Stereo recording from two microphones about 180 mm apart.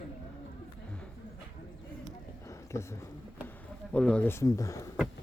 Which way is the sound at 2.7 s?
15° left (ahead or behind).